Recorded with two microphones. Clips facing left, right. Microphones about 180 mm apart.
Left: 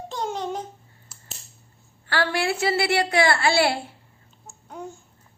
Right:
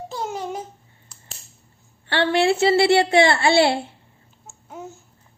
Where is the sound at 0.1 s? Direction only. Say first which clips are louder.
Left 1 dB; 5° right (ahead or behind).